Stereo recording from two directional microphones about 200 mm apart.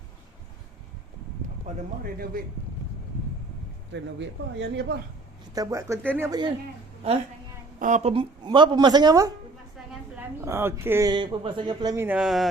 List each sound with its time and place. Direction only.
3.9 s speech: 65° right (ahead or behind)
5.5 s speech: 15° right (ahead or behind)
7.8 s a woman's voice: 35° right (ahead or behind); by 12.5 s centre (ahead or behind)